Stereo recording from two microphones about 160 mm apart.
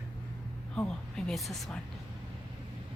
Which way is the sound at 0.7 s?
5° left (ahead or behind).